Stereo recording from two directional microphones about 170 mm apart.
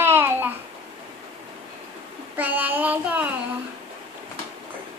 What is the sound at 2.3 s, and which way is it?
Child singing, 10° right (ahead or behind).